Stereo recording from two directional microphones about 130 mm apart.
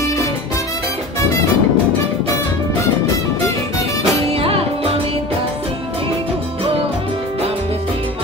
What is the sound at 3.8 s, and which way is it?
Music, 50° right (ahead or behind).